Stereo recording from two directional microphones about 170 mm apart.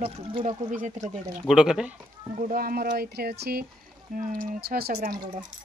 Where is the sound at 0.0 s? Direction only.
35° right (ahead or behind).